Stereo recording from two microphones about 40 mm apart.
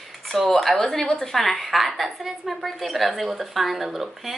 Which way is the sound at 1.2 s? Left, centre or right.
Centre.